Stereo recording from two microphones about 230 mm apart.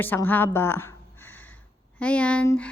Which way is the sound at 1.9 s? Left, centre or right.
Centre.